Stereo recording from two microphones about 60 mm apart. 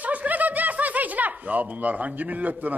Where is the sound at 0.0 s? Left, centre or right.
Right.